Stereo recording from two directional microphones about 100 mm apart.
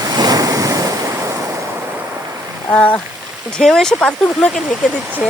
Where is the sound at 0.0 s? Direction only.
40° right (ahead or behind).